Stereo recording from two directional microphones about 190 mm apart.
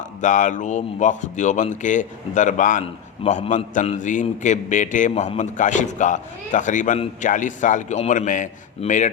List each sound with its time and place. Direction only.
0.2 s a man's voice: 40° left (ahead or behind)